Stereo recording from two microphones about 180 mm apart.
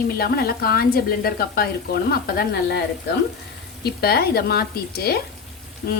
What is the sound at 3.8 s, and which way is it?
A woman's voice, 60° left (ahead or behind).